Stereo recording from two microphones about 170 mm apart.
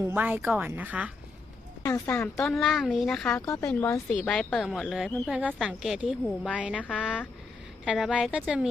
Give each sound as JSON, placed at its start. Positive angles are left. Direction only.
{"t": 0.0, "sound": "a woman's voice", "side_deg": -10}
{"t": 1.8, "sound": "speech", "side_deg": 15}
{"t": 2.4, "sound": "a woman's voice", "side_deg": 0}
{"t": 3.7, "sound": "speech", "side_deg": 15}
{"t": 4.1, "sound": "a woman's voice", "side_deg": 5}